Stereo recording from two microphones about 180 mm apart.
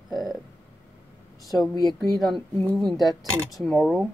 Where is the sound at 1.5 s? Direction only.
20° left (ahead or behind).